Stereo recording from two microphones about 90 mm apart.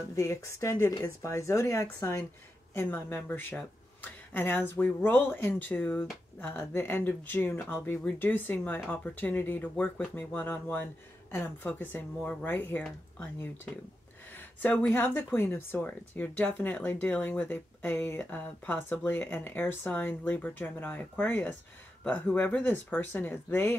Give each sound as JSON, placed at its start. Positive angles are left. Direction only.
{"t": 0.1, "sound": "speech", "side_deg": 35}
{"t": 14.6, "sound": "speech", "side_deg": 20}